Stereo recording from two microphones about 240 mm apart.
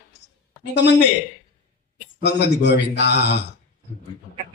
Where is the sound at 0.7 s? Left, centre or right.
Left.